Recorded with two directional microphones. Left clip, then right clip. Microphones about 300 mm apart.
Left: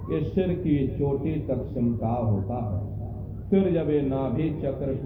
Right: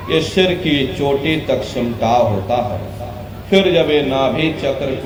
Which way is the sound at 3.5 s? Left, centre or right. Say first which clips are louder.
Right 11 dB; right.